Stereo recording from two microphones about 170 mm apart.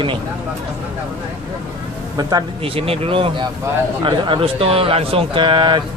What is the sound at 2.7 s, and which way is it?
A man's voice, 35° right (ahead or behind).